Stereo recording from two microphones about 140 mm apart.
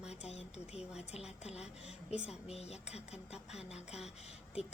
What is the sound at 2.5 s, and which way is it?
Speech, 50° left (ahead or behind).